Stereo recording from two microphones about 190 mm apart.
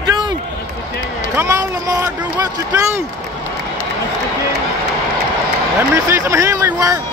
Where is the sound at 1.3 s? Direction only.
15° right (ahead or behind).